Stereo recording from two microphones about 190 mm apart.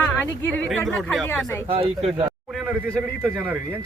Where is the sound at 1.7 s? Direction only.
30° right (ahead or behind).